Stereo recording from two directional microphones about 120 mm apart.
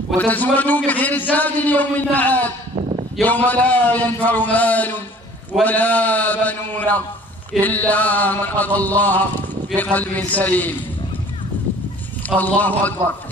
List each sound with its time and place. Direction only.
0.2 s a man's voice: 15° left (ahead or behind)
2.7 s a sound: 60° right (ahead or behind)
3.2 s a man's voice: 15° left (ahead or behind)
12.4 s a man's voice: 15° left (ahead or behind)